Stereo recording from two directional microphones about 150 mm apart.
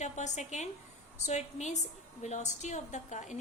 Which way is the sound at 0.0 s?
50° left (ahead or behind).